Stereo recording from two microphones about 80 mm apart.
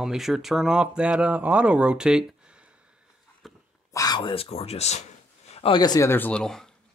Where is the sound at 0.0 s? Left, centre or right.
Centre.